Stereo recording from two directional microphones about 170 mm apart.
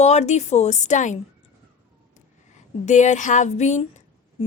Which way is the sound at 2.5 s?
45° left (ahead or behind).